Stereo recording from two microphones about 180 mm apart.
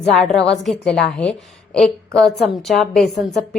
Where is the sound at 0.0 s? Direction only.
5° left (ahead or behind).